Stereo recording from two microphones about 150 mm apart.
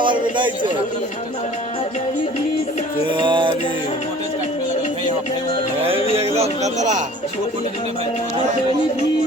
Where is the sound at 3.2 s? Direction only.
30° right (ahead or behind).